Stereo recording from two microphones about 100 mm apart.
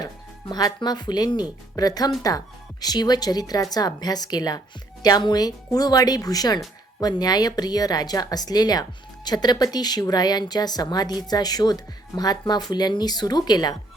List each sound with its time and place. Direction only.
0.0 s a woman's voice: 40° left (ahead or behind)